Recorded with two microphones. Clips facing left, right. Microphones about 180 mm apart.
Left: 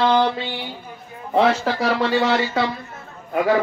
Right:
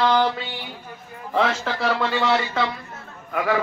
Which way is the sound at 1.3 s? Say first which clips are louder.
Left 5 dB; 40° left (ahead or behind).